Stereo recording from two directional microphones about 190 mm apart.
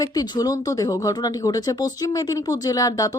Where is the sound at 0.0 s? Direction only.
20° left (ahead or behind).